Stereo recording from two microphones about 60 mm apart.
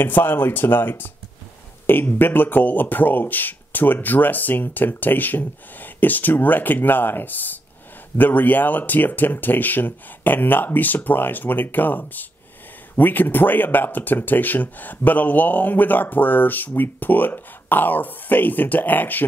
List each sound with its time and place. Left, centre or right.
0.0 s speech: left